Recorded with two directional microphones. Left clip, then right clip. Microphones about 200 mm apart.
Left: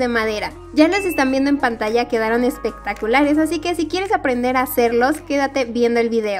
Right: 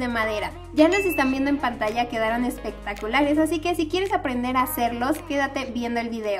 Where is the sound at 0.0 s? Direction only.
35° left (ahead or behind).